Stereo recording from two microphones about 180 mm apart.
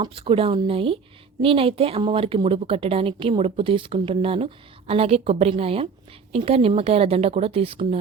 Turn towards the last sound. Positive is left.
turn(degrees=-30)  # may be behind; listen again after turning